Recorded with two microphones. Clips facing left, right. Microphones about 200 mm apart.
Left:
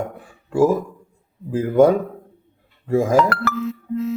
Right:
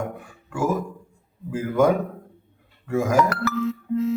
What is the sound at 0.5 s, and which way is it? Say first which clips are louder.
A man's voice: left 7 dB; 30° left (ahead or behind).